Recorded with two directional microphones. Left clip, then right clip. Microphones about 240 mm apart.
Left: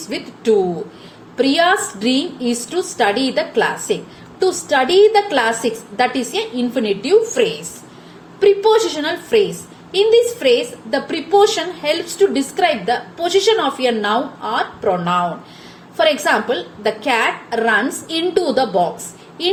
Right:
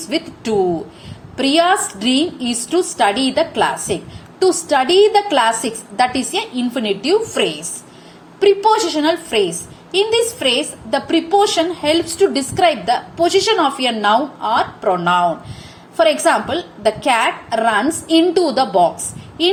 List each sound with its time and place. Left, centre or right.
1.4 s a woman's voice: right